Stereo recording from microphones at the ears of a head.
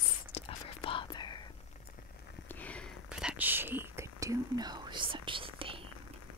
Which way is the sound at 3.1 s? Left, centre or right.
Centre.